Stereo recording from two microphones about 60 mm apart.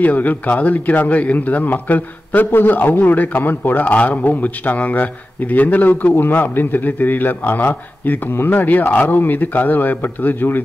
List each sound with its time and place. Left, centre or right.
0.0 s a man's voice: left